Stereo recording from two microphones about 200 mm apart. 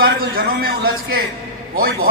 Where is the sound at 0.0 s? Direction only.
50° right (ahead or behind).